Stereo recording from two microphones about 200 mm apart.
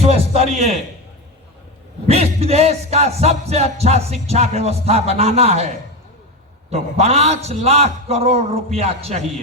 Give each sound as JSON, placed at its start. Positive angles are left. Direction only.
{"t": 0.5, "sound": "music", "side_deg": -35}
{"t": 2.0, "sound": "music", "side_deg": -30}
{"t": 6.7, "sound": "music", "side_deg": -30}